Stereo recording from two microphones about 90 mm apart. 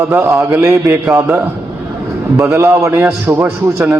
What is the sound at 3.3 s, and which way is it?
Speech, 20° right (ahead or behind).